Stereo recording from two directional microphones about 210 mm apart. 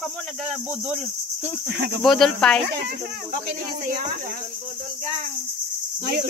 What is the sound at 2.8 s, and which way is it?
Speech, 50° right (ahead or behind).